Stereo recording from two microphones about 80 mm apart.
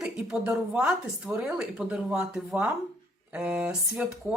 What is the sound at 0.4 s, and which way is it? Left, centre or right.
Speech, centre.